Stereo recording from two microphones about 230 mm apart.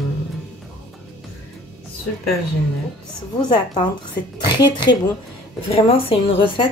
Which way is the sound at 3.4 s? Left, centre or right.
Centre.